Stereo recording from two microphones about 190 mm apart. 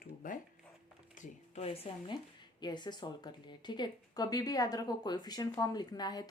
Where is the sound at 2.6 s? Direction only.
25° left (ahead or behind).